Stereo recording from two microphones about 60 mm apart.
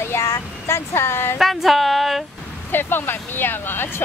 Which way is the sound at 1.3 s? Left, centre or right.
Centre.